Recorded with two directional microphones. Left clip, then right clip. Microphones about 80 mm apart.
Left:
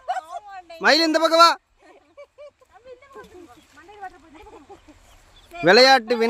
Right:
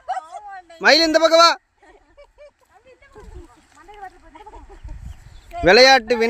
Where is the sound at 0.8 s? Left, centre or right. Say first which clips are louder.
Right 4 dB; centre.